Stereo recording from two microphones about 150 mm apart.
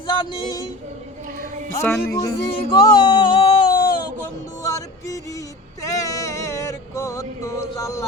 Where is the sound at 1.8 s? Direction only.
15° left (ahead or behind).